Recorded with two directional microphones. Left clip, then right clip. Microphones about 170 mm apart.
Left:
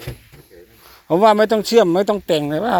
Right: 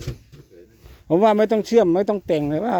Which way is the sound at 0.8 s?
25° right (ahead or behind).